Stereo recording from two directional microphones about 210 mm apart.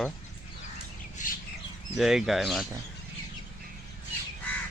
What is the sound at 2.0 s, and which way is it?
Speech, centre (ahead or behind).